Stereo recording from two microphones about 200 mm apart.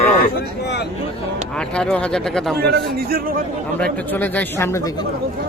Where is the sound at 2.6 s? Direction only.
50° right (ahead or behind).